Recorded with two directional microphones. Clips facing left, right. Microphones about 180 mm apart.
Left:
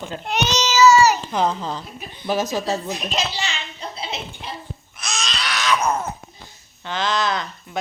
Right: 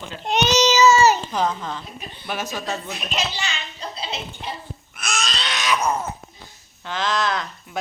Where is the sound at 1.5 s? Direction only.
30° left (ahead or behind).